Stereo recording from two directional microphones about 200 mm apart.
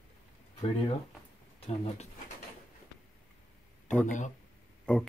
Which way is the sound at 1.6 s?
30° left (ahead or behind).